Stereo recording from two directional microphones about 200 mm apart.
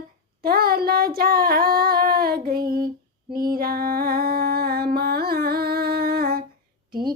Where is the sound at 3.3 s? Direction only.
50° right (ahead or behind).